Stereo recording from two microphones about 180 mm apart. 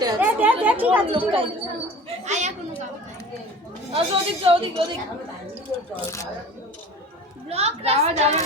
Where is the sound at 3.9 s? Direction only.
30° right (ahead or behind).